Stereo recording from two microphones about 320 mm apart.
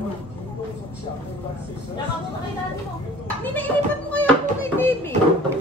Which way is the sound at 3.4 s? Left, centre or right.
Centre.